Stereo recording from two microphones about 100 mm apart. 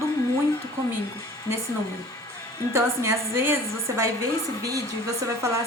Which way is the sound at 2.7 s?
25° right (ahead or behind).